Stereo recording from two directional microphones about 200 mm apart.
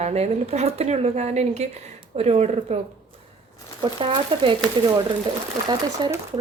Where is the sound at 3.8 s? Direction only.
25° right (ahead or behind).